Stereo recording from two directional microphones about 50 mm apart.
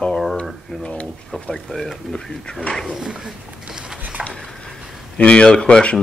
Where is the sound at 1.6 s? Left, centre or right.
Centre.